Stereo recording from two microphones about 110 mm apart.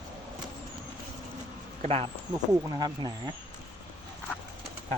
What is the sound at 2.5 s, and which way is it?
Speech, 35° right (ahead or behind).